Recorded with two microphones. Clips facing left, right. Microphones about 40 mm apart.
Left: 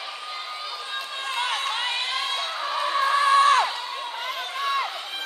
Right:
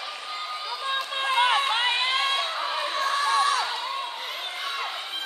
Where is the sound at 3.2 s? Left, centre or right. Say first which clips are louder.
Left 6 dB; left.